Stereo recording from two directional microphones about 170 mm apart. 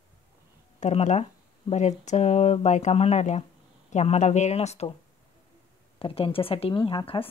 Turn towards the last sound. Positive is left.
turn(degrees=30)  # may be behind; listen again after turning